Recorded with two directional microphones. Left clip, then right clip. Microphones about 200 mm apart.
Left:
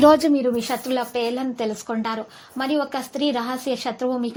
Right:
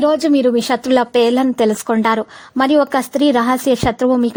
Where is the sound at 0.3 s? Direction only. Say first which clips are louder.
Right 8 dB; 40° right (ahead or behind).